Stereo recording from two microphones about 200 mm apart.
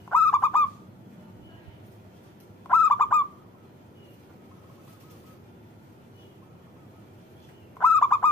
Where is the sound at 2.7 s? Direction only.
10° left (ahead or behind).